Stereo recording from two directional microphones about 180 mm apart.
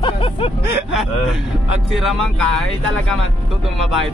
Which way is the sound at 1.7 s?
5° right (ahead or behind).